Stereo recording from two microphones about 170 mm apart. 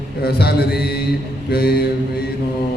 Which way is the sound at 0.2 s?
70° left (ahead or behind).